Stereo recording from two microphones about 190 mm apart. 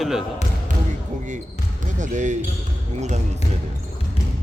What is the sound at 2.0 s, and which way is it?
Speech, 40° right (ahead or behind).